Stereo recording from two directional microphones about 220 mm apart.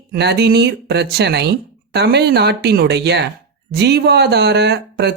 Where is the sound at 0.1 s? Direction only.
50° right (ahead or behind).